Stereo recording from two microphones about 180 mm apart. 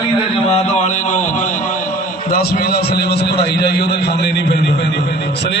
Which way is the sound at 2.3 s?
60° left (ahead or behind).